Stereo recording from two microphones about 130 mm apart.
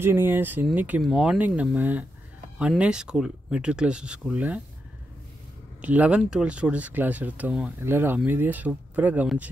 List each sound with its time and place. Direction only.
0.0 s speech: 15° right (ahead or behind)
5.8 s speech: 10° right (ahead or behind)